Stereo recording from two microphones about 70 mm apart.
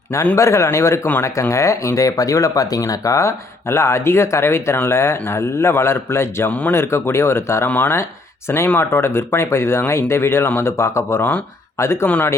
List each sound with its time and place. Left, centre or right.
0.3 s speech: left
6.5 s speech: left
6.7 s speech: left
11.8 s speech: left